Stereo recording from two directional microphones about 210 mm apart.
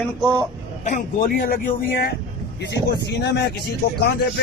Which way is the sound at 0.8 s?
40° left (ahead or behind).